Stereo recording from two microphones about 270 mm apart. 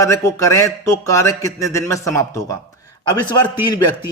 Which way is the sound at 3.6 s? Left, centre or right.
Centre.